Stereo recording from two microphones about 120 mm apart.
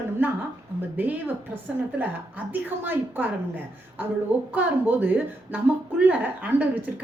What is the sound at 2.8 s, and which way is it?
A woman's voice, 15° right (ahead or behind).